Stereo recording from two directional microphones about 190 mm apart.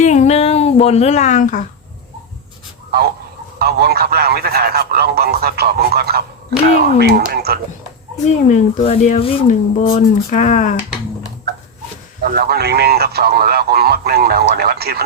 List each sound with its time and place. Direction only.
0.0 s a sound: 40° left (ahead or behind)
3.6 s a man's voice: 55° right (ahead or behind)
8.2 s speech: 40° left (ahead or behind)
12.2 s a man's voice: 55° right (ahead or behind)